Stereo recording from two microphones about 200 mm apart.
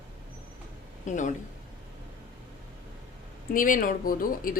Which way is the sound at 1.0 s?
40° left (ahead or behind).